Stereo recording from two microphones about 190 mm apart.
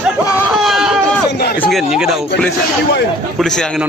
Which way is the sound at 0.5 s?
Centre (ahead or behind).